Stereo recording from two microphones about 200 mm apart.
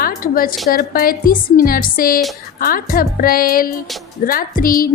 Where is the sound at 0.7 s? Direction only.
45° left (ahead or behind).